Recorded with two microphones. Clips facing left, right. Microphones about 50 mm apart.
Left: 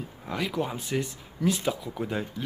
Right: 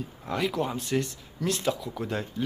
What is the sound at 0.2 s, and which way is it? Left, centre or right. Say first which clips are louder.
Speech: right 2 dB; centre.